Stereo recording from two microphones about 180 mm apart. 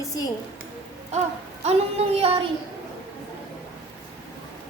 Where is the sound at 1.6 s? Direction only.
35° right (ahead or behind).